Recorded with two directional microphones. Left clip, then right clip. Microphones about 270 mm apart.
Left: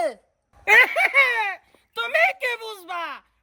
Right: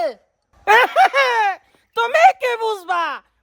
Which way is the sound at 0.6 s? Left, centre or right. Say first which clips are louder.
Right 4 dB; centre.